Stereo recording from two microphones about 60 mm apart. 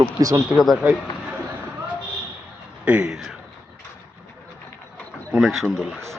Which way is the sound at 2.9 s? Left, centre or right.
Centre.